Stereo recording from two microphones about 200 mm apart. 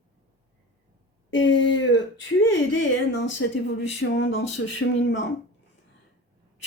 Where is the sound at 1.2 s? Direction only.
70° left (ahead or behind).